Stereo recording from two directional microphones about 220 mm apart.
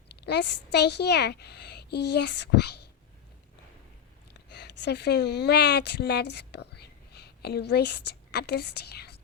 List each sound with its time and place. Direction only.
0.2 s a woman's voice: 50° left (ahead or behind)
4.4 s a woman's voice: 50° left (ahead or behind)